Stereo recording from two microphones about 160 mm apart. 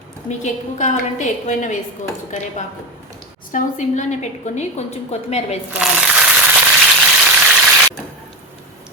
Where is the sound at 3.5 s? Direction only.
50° left (ahead or behind).